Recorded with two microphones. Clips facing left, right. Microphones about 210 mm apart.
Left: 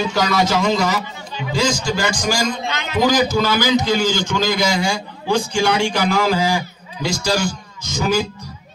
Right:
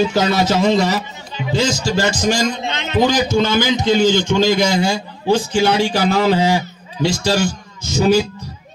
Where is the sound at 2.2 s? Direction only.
25° right (ahead or behind).